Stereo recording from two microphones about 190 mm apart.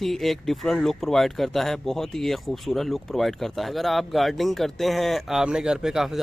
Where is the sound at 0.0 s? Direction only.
Centre (ahead or behind).